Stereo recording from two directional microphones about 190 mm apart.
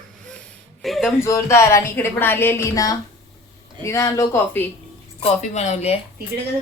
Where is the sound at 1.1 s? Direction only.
15° left (ahead or behind).